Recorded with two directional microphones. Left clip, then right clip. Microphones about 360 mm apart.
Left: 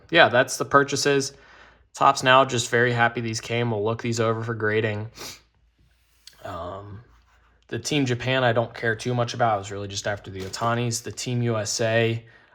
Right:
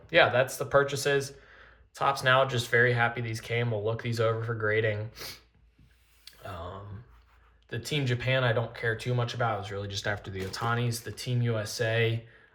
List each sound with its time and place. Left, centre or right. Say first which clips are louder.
0.1 s speech: left 6 dB; centre
6.2 s a sound: left 7 dB; centre
7.7 s speech: left 7 dB; centre